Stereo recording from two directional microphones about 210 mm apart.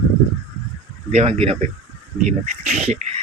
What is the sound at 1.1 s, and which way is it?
Speech, 30° right (ahead or behind).